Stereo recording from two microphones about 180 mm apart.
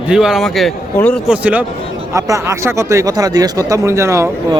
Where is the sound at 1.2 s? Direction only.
10° right (ahead or behind).